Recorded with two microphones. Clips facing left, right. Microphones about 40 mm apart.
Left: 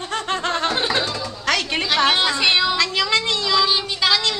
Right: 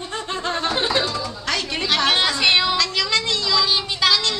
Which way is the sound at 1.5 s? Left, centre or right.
Left.